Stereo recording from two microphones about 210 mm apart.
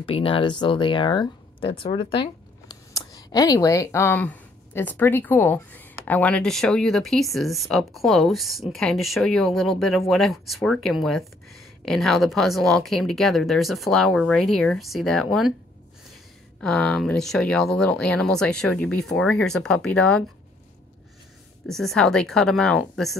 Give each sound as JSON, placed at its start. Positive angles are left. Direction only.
{"t": 0.0, "sound": "speech", "side_deg": 25}
{"t": 16.6, "sound": "speech", "side_deg": 5}
{"t": 21.6, "sound": "speech", "side_deg": 0}